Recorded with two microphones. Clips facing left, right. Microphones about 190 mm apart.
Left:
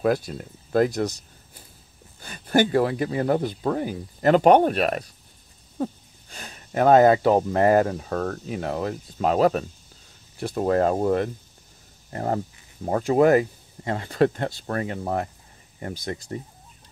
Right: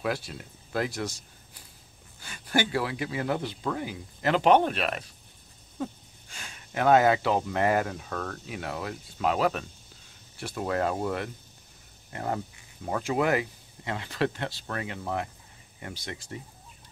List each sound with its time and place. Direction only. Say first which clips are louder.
0.0 s speech: left 8 dB; 45° left (ahead or behind)
2.2 s speech: left 7 dB; 45° left (ahead or behind)
6.3 s speech: left 7 dB; 40° left (ahead or behind)